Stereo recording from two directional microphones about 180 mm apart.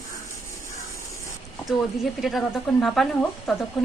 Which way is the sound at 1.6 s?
Centre (ahead or behind).